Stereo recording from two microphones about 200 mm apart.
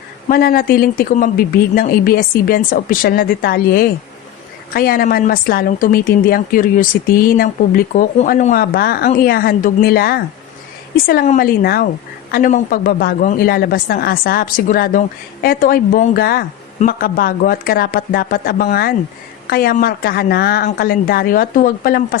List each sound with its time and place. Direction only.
0.3 s speech: 50° left (ahead or behind)